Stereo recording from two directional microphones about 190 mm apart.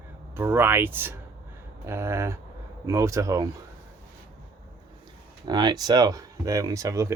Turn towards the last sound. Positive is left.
turn(degrees=-15)  # may be behind; listen again after turning